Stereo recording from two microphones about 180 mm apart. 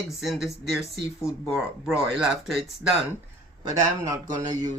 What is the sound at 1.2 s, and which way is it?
Speech, 15° left (ahead or behind).